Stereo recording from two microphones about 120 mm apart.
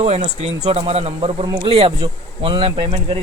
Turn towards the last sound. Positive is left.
turn(degrees=-50)  # may be behind; listen again after turning